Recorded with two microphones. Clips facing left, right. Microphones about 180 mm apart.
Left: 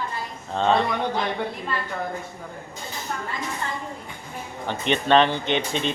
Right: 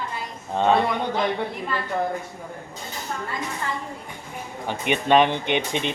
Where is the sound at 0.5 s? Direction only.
10° right (ahead or behind).